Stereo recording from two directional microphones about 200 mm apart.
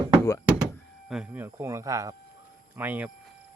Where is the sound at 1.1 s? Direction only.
5° right (ahead or behind).